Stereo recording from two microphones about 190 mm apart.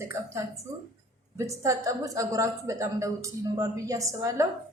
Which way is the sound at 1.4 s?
15° right (ahead or behind).